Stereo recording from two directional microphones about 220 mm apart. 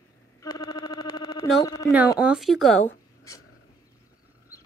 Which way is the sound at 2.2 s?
Centre (ahead or behind).